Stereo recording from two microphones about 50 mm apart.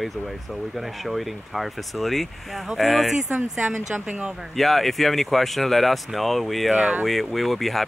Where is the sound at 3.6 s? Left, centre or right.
Right.